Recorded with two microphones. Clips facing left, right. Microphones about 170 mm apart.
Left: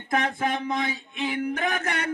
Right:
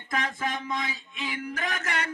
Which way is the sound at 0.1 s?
60° left (ahead or behind).